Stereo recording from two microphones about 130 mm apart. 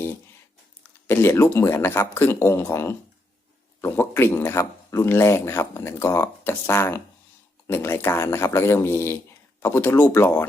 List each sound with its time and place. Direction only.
1.0 s a man's voice: 15° left (ahead or behind)